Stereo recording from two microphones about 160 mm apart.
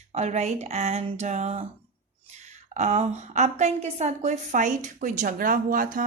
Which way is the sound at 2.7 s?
45° right (ahead or behind).